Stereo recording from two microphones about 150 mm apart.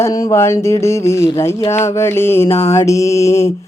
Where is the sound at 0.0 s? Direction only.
20° left (ahead or behind).